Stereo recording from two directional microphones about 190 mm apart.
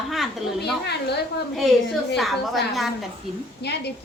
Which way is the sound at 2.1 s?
Centre (ahead or behind).